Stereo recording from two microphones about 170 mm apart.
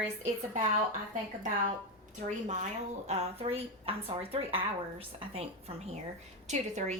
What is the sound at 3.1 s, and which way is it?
A woman's voice, 40° right (ahead or behind).